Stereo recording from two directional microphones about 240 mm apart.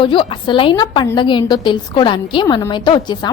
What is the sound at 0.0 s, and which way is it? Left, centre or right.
A woman's voice, left.